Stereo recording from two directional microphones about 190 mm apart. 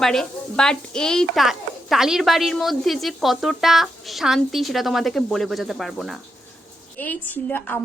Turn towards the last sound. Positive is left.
turn(degrees=10)  # may be behind; listen again after turning